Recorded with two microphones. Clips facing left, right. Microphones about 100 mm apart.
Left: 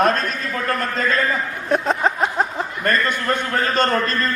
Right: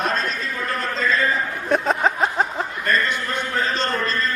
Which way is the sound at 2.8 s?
50° left (ahead or behind).